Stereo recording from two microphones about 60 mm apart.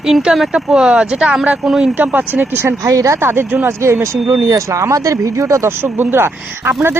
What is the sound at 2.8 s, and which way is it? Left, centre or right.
Speech, right.